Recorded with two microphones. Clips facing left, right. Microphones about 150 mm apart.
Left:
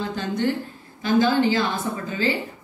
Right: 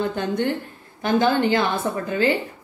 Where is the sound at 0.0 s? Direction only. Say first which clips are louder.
Right 2 dB; 55° right (ahead or behind).